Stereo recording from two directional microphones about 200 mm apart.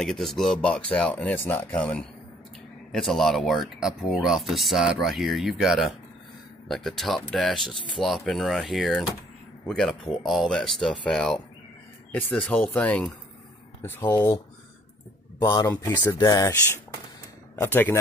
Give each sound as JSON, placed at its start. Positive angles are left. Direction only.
{"t": 0.0, "sound": "speech", "side_deg": 0}
{"t": 15.4, "sound": "speech", "side_deg": 20}